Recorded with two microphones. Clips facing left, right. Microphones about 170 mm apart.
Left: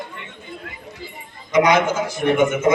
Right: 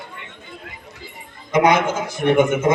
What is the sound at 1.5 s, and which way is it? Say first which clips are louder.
Speech: even; 55° right (ahead or behind).